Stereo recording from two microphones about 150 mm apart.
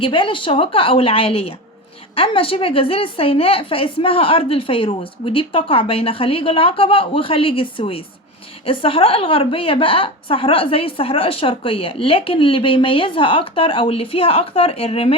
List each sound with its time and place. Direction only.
0.0 s a woman's voice: 35° left (ahead or behind)